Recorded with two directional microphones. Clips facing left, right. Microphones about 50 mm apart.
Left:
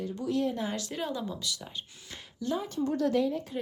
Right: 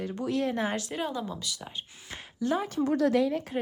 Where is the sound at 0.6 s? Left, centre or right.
Right.